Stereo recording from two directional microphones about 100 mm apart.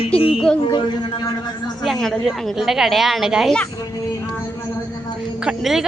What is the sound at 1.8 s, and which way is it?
A woman's voice, centre (ahead or behind).